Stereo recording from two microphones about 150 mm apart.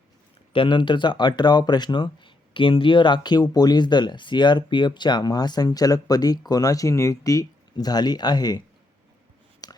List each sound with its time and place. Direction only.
0.5 s speech: 35° left (ahead or behind)
9.6 s whispering: 25° left (ahead or behind)